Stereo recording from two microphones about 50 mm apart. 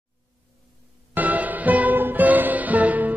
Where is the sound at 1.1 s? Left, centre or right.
Right.